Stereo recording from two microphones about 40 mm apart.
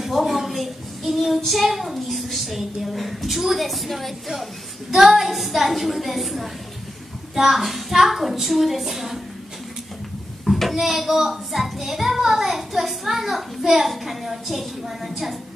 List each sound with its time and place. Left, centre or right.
0.0 s a child's voice: centre
10.4 s a child's voice: centre